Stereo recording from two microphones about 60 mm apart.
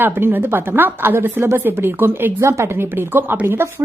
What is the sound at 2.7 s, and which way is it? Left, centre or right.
Speech, right.